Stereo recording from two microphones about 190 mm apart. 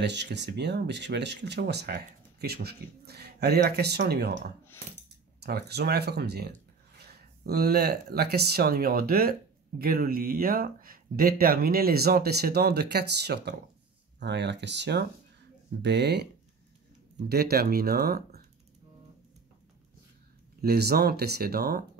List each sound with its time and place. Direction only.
0.0 s speech: 65° right (ahead or behind)
5.4 s speech: 60° right (ahead or behind)
17.3 s speech: 55° right (ahead or behind)
20.6 s speech: 55° right (ahead or behind)